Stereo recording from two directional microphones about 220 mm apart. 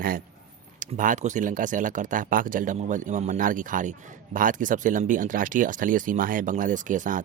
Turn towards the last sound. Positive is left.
turn(degrees=-35)  # may be behind; listen again after turning